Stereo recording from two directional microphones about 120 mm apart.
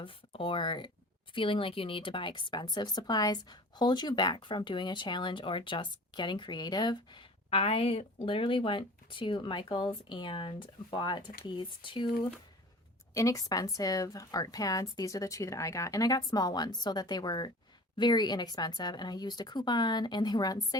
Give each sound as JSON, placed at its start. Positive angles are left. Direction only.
{"t": 0.0, "sound": "speech", "side_deg": 45}
{"t": 13.1, "sound": "a woman's voice", "side_deg": 25}